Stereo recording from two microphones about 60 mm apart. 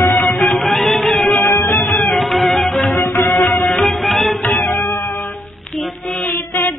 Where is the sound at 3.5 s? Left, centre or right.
Centre.